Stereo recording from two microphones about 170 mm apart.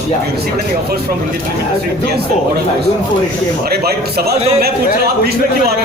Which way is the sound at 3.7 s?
65° right (ahead or behind).